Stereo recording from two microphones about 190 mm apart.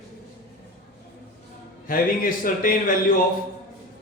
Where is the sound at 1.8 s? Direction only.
50° left (ahead or behind).